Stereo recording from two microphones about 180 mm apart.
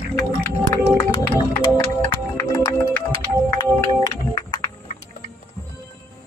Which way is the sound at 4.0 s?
20° left (ahead or behind).